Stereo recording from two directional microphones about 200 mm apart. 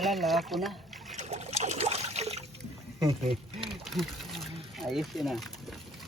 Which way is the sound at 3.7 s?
Centre (ahead or behind).